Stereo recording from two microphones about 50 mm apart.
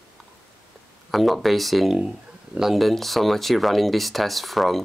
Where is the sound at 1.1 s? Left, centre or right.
Centre.